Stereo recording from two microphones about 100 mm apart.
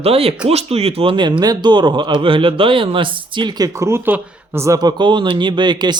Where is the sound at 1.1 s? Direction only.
50° right (ahead or behind).